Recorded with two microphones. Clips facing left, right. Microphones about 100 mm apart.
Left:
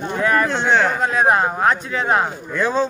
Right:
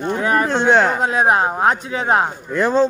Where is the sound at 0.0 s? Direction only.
20° right (ahead or behind).